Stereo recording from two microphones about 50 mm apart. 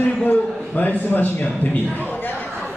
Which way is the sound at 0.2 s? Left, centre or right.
Left.